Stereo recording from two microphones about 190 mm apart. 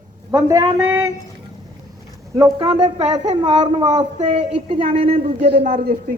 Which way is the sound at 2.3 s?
20° right (ahead or behind).